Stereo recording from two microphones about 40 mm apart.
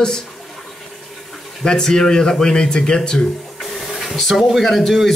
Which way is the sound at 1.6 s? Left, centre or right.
Centre.